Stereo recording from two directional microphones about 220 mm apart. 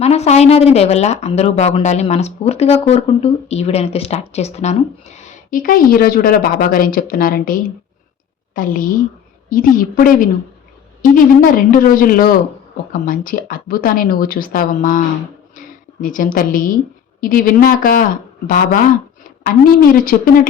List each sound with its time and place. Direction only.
0.0 s a woman's voice: 30° left (ahead or behind)
20.1 s speech: 40° left (ahead or behind)